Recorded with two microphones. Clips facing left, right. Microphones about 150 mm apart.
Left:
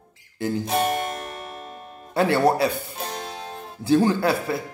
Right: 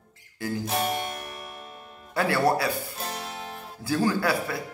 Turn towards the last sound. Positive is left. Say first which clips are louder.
# left 4 dB
turn(degrees=25)  # may be behind; listen again after turning